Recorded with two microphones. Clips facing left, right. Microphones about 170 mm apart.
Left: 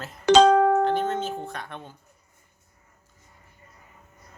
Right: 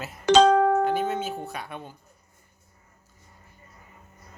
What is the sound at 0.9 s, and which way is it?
Tuning fork, 10° right (ahead or behind).